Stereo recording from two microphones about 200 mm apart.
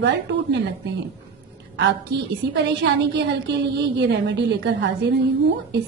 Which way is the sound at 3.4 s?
60° right (ahead or behind).